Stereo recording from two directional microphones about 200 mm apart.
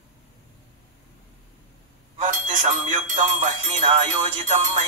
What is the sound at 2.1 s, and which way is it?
Music, 40° right (ahead or behind).